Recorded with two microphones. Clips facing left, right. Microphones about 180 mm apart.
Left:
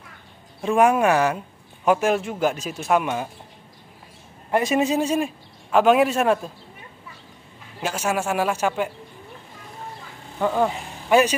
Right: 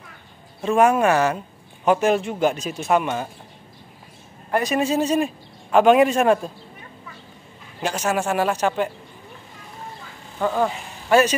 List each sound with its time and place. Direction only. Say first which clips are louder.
0.6 s speech: right 1 dB; 10° left (ahead or behind)
4.5 s speech: left 1 dB; 20° left (ahead or behind)
5.2 s a man's voice: right 2 dB; centre (ahead or behind)
7.8 s speech: right 2 dB; 5° left (ahead or behind)
10.4 s speech: even; 10° left (ahead or behind)